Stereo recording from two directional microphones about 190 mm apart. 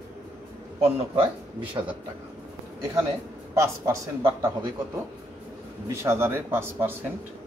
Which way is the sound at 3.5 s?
15° right (ahead or behind).